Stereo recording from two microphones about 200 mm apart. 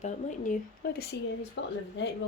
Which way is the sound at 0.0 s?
40° left (ahead or behind).